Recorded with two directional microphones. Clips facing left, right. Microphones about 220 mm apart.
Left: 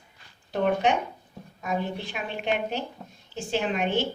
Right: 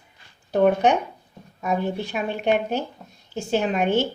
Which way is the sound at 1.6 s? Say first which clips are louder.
Right 5 dB; 45° right (ahead or behind).